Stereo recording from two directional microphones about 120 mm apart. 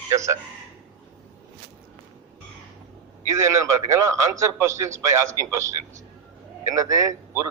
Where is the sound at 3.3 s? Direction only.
25° right (ahead or behind).